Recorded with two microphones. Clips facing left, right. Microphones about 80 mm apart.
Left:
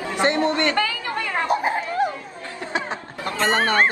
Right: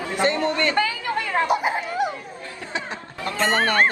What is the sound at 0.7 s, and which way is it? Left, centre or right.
Speech, right.